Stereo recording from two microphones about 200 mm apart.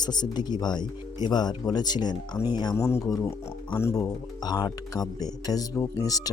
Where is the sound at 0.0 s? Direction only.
20° left (ahead or behind).